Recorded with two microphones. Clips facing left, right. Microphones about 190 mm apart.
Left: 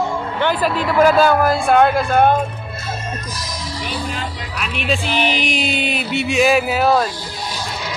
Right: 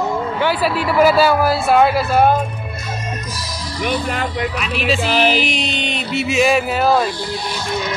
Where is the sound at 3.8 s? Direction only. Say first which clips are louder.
Right 7 dB; 60° right (ahead or behind).